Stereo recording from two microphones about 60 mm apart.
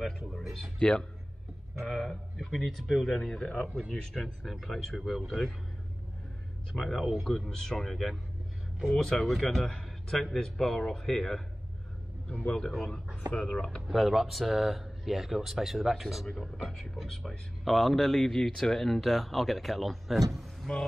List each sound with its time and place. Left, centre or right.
0.4 s speech: centre
0.7 s speech: centre
1.8 s speech: centre
3.6 s speech: centre
6.7 s speech: centre
7.2 s speech: centre
13.8 s speech: centre
20.7 s speech: centre